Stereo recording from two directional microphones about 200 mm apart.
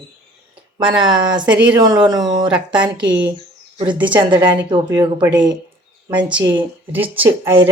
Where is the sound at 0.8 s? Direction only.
25° right (ahead or behind).